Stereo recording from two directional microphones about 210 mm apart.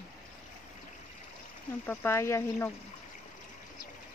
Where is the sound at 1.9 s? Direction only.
10° left (ahead or behind).